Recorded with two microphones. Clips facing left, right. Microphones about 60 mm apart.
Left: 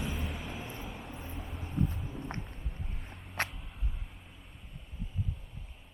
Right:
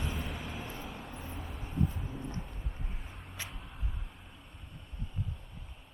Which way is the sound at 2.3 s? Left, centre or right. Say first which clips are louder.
Even; centre.